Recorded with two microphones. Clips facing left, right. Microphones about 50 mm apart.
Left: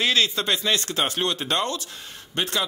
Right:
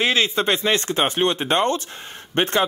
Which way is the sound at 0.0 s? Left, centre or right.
Right.